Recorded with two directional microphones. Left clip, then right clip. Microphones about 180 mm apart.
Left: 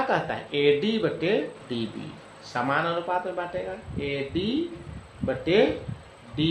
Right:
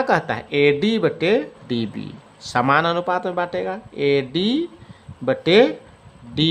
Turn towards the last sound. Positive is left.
turn(degrees=-55)  # may be behind; listen again after turning